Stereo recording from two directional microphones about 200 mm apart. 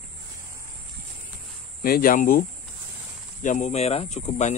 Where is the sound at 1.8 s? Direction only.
45° left (ahead or behind).